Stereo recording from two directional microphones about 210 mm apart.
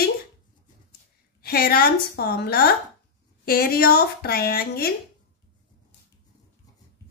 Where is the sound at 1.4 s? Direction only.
45° left (ahead or behind).